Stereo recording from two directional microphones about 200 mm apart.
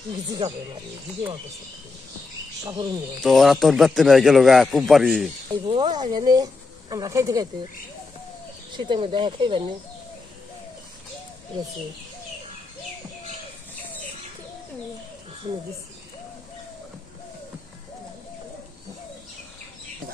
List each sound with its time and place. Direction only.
0.4 s speech: 35° right (ahead or behind)
2.6 s speech: 20° right (ahead or behind)
3.2 s speech: centre (ahead or behind)
5.5 s speech: 25° right (ahead or behind)
8.7 s speech: 25° right (ahead or behind)